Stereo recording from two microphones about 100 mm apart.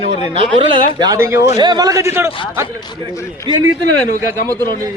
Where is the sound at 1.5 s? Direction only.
45° right (ahead or behind); by 2.3 s 30° right (ahead or behind).